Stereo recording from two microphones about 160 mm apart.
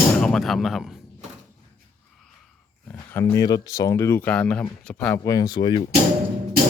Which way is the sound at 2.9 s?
15° left (ahead or behind).